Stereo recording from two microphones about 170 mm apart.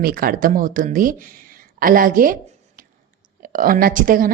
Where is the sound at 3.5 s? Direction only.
55° right (ahead or behind).